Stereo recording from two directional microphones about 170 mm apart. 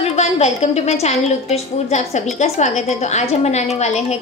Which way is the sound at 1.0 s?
40° left (ahead or behind).